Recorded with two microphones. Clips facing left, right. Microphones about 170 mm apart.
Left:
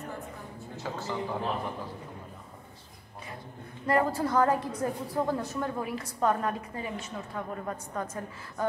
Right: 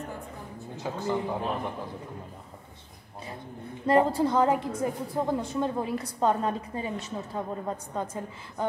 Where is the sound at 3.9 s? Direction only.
25° right (ahead or behind).